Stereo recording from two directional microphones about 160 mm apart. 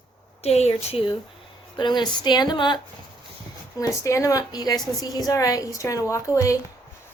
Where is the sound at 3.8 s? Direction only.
20° left (ahead or behind).